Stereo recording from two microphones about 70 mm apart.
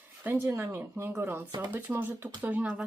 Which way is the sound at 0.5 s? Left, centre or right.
Right.